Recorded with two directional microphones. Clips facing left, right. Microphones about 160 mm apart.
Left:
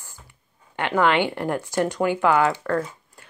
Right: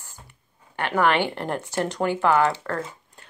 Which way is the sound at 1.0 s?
15° left (ahead or behind).